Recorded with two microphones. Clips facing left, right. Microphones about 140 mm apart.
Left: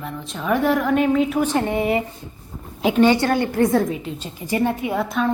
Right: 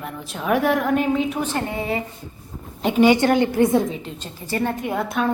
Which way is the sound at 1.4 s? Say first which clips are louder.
Left 5 dB; 15° left (ahead or behind).